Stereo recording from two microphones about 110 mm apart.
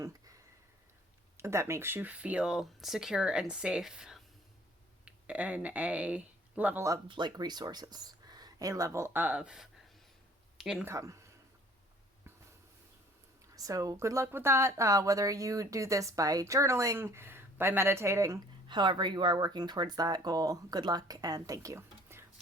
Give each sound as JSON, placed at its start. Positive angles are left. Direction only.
{"t": 1.4, "sound": "speech", "side_deg": -25}
{"t": 7.1, "sound": "speech", "side_deg": -40}
{"t": 10.8, "sound": "speech", "side_deg": -30}
{"t": 13.6, "sound": "a woman's voice", "side_deg": -30}
{"t": 18.7, "sound": "speech", "side_deg": -45}